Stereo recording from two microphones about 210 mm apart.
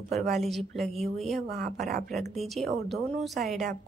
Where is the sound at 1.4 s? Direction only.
45° right (ahead or behind).